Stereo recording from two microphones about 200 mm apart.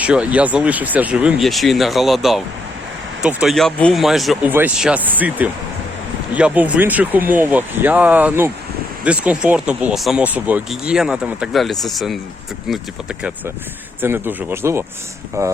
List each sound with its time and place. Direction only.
0.0 s speech: 5° right (ahead or behind)